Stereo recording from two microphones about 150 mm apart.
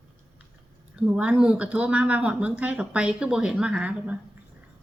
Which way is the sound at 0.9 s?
5° right (ahead or behind).